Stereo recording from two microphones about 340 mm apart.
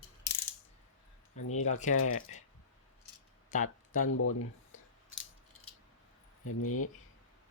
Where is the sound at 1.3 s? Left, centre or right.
Left.